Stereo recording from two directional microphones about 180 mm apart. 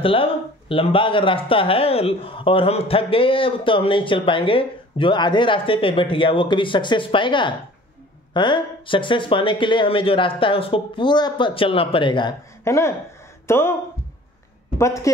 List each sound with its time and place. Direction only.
0.0 s speech: 30° left (ahead or behind)
12.6 s speech: 15° left (ahead or behind)